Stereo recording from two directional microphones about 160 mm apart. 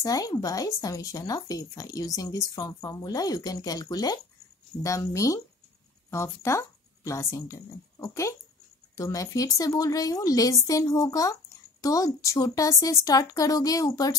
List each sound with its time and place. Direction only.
0.0 s speech: 20° left (ahead or behind)